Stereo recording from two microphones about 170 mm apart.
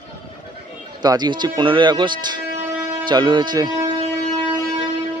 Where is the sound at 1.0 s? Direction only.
25° right (ahead or behind).